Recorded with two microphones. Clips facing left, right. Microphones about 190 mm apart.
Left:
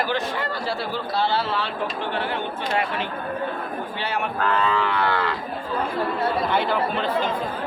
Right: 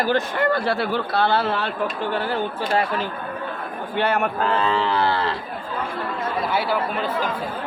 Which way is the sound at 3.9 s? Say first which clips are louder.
Right 8 dB; 55° right (ahead or behind).